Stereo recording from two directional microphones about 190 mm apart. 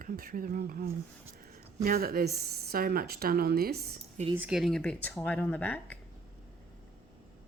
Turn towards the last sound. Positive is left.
turn(degrees=10)  # may be behind; listen again after turning